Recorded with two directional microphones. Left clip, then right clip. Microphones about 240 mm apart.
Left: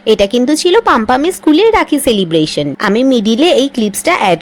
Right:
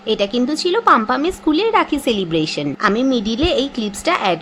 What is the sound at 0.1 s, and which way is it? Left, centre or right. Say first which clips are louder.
Speech: left 8 dB; left.